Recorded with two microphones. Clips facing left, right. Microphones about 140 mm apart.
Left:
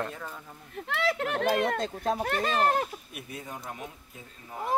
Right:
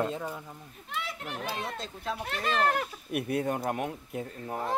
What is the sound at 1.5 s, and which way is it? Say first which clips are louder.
Speech: left 9 dB; 55° left (ahead or behind).